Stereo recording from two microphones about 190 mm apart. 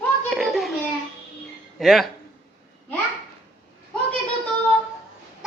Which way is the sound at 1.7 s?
Centre (ahead or behind).